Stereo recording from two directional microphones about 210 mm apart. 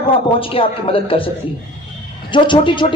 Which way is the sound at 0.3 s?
25° left (ahead or behind).